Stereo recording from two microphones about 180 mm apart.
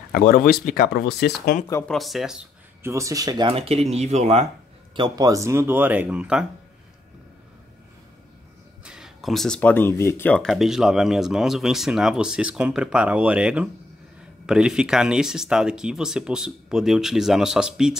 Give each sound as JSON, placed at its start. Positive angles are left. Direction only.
{"t": 0.1, "sound": "speech", "side_deg": 55}
{"t": 1.9, "sound": "speech", "side_deg": 0}
{"t": 2.8, "sound": "speech", "side_deg": -15}
{"t": 3.4, "sound": "speech", "side_deg": -30}
{"t": 4.9, "sound": "speech", "side_deg": -25}
{"t": 8.8, "sound": "speech", "side_deg": -5}